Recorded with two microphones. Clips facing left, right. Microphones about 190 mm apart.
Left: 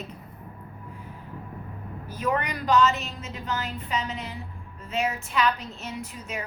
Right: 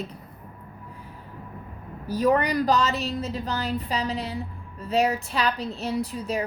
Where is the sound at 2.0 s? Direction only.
35° right (ahead or behind).